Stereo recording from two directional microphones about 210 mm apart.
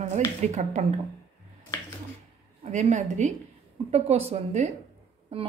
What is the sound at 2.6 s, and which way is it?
A woman's voice, 35° right (ahead or behind).